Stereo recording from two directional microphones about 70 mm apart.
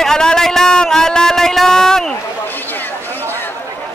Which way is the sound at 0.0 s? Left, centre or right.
Centre.